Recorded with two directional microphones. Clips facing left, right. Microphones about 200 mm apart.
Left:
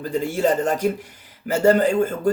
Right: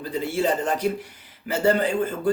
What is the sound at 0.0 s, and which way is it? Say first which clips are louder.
Speech: left 3 dB; 45° left (ahead or behind).